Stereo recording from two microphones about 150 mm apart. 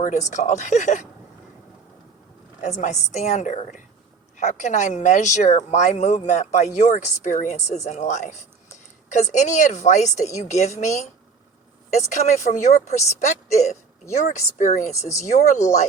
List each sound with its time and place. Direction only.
0.3 s speech: 50° left (ahead or behind)
2.6 s speech: 50° left (ahead or behind)